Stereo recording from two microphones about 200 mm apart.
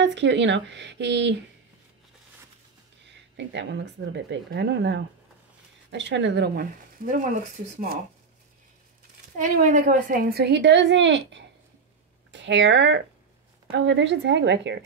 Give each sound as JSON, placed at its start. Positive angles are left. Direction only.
{"t": 0.0, "sound": "a woman's voice", "side_deg": -60}
{"t": 3.1, "sound": "a woman's voice", "side_deg": -60}
{"t": 9.4, "sound": "a woman's voice", "side_deg": -40}